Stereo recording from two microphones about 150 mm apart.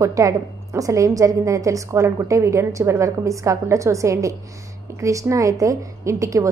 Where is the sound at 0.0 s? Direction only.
20° right (ahead or behind).